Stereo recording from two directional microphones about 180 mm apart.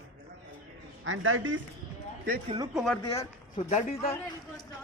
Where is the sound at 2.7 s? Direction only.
5° left (ahead or behind).